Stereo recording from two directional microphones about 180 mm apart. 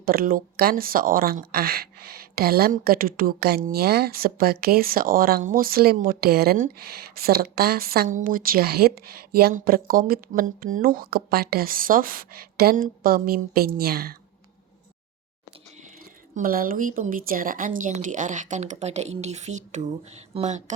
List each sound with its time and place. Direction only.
0.0 s speech: 55° right (ahead or behind)
16.3 s a woman's voice: 50° right (ahead or behind)